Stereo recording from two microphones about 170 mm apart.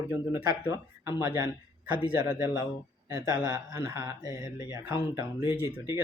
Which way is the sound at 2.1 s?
10° right (ahead or behind).